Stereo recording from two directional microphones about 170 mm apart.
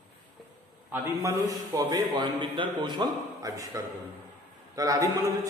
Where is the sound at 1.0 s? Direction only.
15° right (ahead or behind).